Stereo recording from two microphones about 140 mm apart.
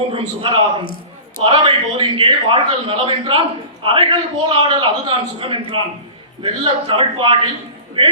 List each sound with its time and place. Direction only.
0.1 s a man's voice: 40° right (ahead or behind)